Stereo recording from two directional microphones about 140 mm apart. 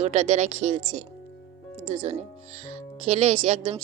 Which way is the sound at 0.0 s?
55° right (ahead or behind).